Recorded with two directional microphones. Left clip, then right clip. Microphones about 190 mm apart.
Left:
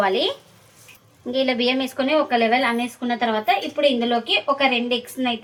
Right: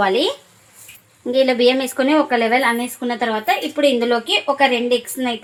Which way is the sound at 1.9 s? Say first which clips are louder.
Right 3 dB; 45° right (ahead or behind).